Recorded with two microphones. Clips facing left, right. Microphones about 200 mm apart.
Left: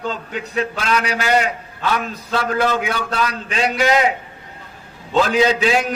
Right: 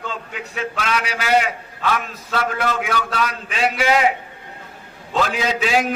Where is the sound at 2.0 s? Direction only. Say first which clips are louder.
Left 2 dB; 35° left (ahead or behind).